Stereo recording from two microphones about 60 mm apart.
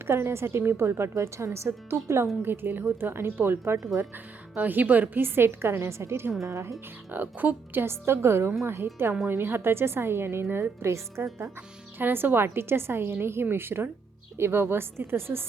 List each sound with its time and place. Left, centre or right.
0.1 s a woman's voice: right
2.4 s a woman's voice: right
4.5 s a woman's voice: right
6.4 s speech: right
7.1 s a woman's voice: right
10.8 s a woman's voice: right
11.9 s a woman's voice: right